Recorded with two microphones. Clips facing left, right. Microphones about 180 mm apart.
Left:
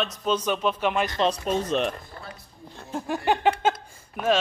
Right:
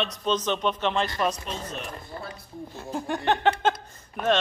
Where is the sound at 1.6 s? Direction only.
90° left.